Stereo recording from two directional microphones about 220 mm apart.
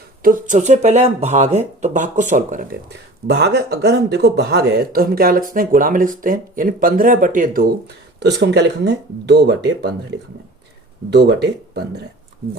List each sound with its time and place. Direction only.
0.2 s speech: 40° right (ahead or behind)
3.2 s speech: 50° right (ahead or behind)
11.1 s speech: 50° right (ahead or behind)